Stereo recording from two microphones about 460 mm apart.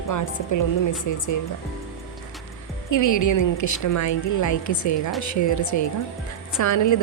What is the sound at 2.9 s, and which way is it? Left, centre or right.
A woman's voice, left.